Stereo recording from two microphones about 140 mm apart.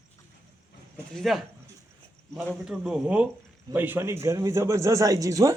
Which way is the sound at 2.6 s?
5° right (ahead or behind).